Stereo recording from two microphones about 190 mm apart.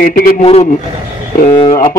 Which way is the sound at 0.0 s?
50° left (ahead or behind).